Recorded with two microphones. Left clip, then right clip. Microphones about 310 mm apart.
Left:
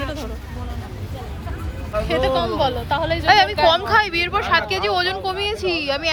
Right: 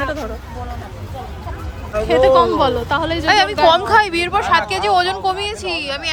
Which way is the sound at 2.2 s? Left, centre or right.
Right.